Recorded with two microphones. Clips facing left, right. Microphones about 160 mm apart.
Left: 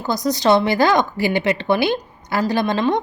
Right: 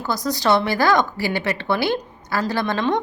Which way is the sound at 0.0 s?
20° left (ahead or behind).